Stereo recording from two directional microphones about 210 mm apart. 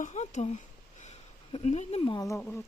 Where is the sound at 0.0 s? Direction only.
35° left (ahead or behind).